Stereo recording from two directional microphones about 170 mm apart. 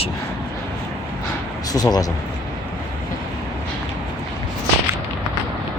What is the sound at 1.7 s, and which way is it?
Speech, 20° left (ahead or behind).